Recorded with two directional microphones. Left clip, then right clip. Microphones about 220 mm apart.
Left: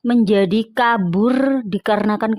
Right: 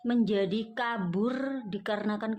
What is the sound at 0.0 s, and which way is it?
Speech, 40° left (ahead or behind).